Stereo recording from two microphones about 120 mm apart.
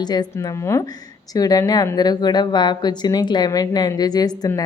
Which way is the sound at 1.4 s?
30° left (ahead or behind).